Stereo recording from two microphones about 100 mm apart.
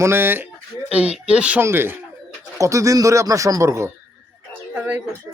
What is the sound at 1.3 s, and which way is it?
Speech, 10° right (ahead or behind).